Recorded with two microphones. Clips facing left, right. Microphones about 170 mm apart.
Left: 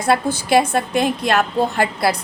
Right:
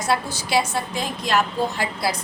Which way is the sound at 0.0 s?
55° left (ahead or behind).